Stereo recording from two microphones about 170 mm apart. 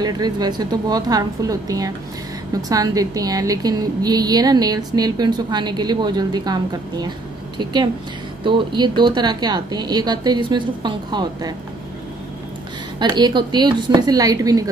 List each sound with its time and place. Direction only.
0.0 s a woman's voice: 25° right (ahead or behind)
13.0 s a woman's voice: 25° right (ahead or behind)